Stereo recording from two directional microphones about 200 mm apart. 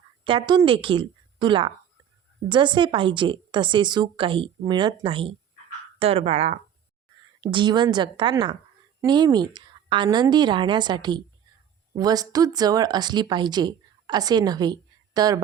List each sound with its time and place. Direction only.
0.3 s a woman's voice: 25° right (ahead or behind)